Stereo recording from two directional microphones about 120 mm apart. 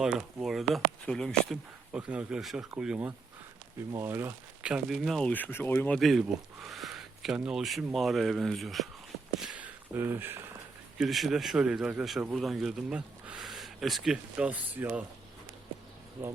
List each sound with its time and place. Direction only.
0.0 s speech: 5° right (ahead or behind)
1.9 s speech: 10° right (ahead or behind)
3.8 s speech: 20° right (ahead or behind)
4.7 s speech: centre (ahead or behind); by 6.0 s 15° left (ahead or behind)
6.0 s speech: centre (ahead or behind)
9.4 s a sound: 5° right (ahead or behind)
9.9 s speech: 20° right (ahead or behind)
10.9 s speech: centre (ahead or behind)